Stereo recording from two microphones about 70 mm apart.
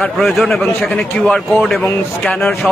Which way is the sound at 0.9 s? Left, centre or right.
Centre.